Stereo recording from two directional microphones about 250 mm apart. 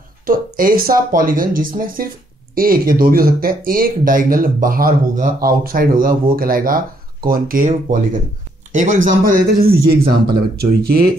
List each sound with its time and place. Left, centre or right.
0.3 s speech: right